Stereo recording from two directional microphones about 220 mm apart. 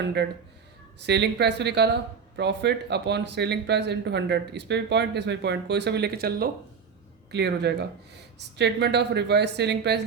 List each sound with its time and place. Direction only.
0.0 s speech: 50° right (ahead or behind)